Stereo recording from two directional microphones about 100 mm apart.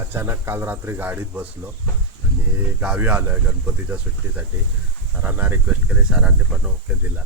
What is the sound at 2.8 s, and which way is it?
Speech, 10° right (ahead or behind).